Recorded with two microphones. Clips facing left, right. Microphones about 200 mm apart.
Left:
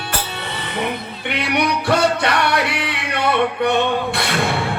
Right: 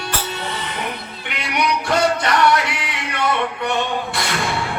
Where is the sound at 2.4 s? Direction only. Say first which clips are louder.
Right 2 dB; 60° left (ahead or behind).